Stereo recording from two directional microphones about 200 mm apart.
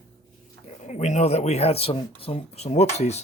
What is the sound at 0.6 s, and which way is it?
Speech, 35° left (ahead or behind).